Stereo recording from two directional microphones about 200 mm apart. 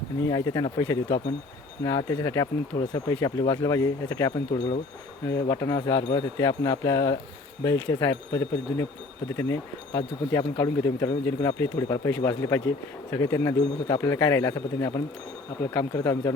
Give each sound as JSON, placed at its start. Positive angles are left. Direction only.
{"t": 0.3, "sound": "speech", "side_deg": 20}